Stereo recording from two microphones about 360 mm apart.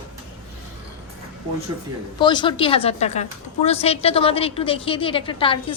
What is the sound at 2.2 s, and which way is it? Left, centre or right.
A woman's voice, centre.